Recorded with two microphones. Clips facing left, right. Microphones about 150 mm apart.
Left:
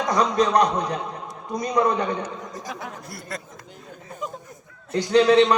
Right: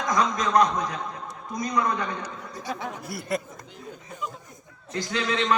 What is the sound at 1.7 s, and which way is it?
Speech, 35° left (ahead or behind).